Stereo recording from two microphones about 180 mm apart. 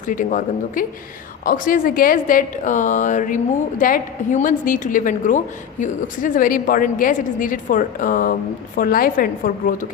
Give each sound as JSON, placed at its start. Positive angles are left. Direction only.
{"t": 0.0, "sound": "a woman's voice", "side_deg": 45}